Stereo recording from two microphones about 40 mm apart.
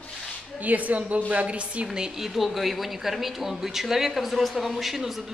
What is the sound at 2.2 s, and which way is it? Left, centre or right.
Speech, centre.